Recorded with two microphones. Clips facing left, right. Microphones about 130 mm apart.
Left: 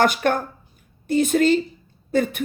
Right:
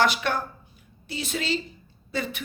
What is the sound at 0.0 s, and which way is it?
A woman's voice, 50° left (ahead or behind).